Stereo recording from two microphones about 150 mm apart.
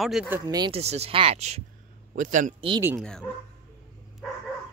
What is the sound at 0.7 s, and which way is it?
Speech, 45° right (ahead or behind).